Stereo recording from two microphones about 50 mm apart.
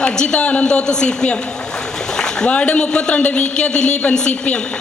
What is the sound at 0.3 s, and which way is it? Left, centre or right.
A woman's voice, left.